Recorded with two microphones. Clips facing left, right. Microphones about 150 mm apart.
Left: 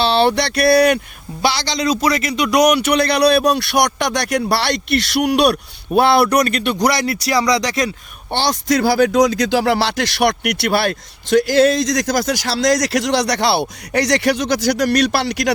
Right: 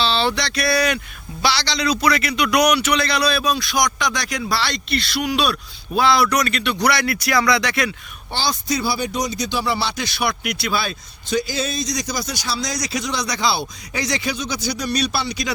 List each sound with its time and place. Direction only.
0.0 s a sound: 60° left (ahead or behind)
1.4 s a man's voice: 50° left (ahead or behind)
8.3 s speech: 70° left (ahead or behind); by 15.5 s 90° left